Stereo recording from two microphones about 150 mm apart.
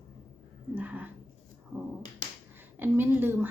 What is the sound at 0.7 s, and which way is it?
Speech, 10° right (ahead or behind).